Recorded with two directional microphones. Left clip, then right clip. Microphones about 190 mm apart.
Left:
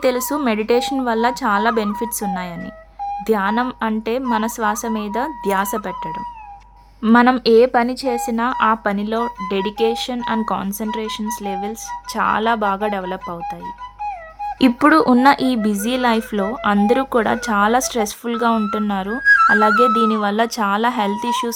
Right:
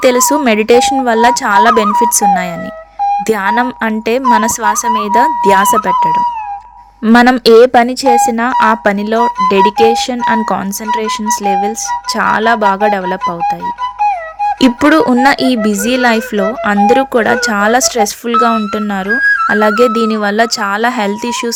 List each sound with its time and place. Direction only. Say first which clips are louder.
0.0 s speech: right 9 dB; 20° right (ahead or behind)
3.2 s speech: right 6 dB; 20° right (ahead or behind)
14.0 s music: right 13 dB; 55° right (ahead or behind)
14.6 s speech: right 3 dB; 15° right (ahead or behind)
19.1 s music: right 2 dB; centre (ahead or behind)
19.5 s speech: right 3 dB; 20° right (ahead or behind)